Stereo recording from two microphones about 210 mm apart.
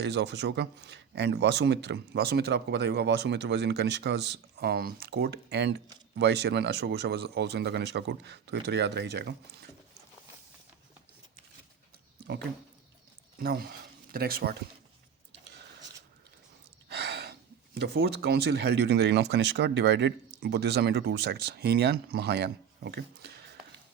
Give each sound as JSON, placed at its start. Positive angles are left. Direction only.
{"t": 0.0, "sound": "speech", "side_deg": -55}
{"t": 12.3, "sound": "speech", "side_deg": -50}
{"t": 16.9, "sound": "gasp", "side_deg": -50}
{"t": 17.8, "sound": "speech", "side_deg": -50}